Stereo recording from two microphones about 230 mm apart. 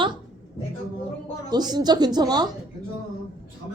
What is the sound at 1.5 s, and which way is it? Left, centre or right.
Speech, centre.